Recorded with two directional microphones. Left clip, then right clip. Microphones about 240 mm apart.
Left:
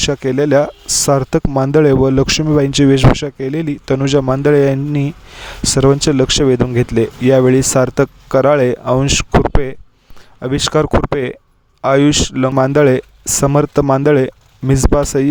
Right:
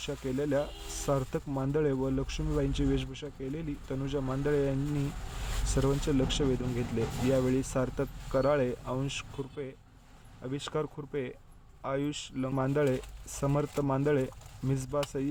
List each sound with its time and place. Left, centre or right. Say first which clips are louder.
0.0 s speech: left 19 dB; left